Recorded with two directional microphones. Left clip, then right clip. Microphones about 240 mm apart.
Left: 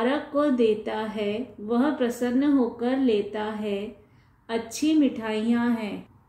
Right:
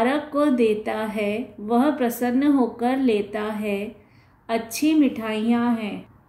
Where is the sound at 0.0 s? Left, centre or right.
Right.